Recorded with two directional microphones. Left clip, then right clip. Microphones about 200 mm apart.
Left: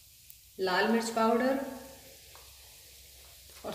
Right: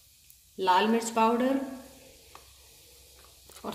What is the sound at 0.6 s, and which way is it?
Speech, 45° right (ahead or behind).